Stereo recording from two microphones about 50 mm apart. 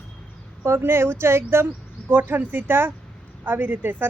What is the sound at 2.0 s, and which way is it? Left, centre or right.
A woman's voice, right.